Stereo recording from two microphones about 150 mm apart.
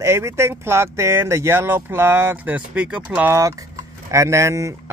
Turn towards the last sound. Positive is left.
turn(degrees=-20)  # may be behind; listen again after turning